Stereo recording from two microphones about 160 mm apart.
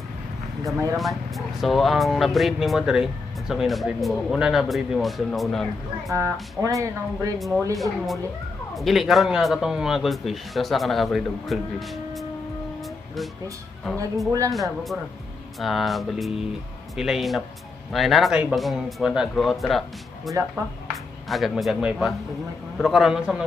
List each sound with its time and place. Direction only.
0.9 s speech: centre (ahead or behind)
6.6 s speech: 20° right (ahead or behind)
7.3 s speech: centre (ahead or behind)
14.5 s speech: centre (ahead or behind)